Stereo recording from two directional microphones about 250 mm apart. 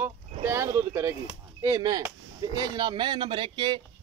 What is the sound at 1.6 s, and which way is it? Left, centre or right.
Speech, centre.